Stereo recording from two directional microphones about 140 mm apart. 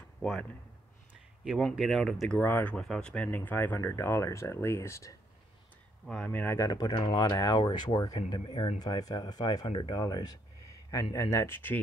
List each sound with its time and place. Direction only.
0.2 s speech: 5° left (ahead or behind)
6.0 s speech: 10° left (ahead or behind)
6.7 s speech: 30° left (ahead or behind); by 11.8 s 15° left (ahead or behind)